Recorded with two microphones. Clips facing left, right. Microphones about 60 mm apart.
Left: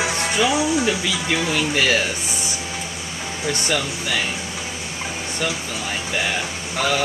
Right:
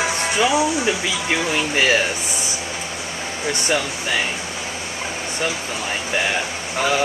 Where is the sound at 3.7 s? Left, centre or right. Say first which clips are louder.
Right 3 dB; centre.